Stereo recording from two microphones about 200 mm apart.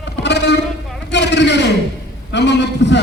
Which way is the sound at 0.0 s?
60° left (ahead or behind).